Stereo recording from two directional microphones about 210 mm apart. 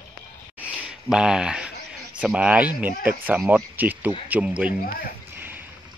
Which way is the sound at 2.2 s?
5° right (ahead or behind).